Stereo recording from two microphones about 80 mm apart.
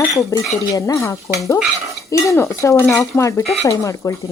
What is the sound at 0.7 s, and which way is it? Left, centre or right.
Speech, left.